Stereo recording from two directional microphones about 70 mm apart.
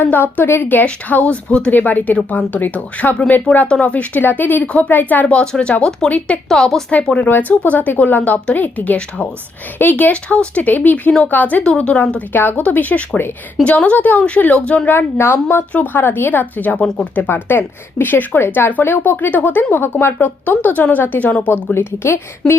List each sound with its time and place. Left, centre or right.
0.0 s speech: left
6.5 s a woman's voice: centre
6.9 s a woman's voice: centre
7.3 s speech: left
11.6 s a woman's voice: centre
11.9 s speech: left
14.8 s speech: left
15.7 s speech: left
17.2 s speech: left